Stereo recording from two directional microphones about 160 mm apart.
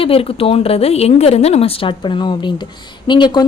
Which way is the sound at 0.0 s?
35° left (ahead or behind).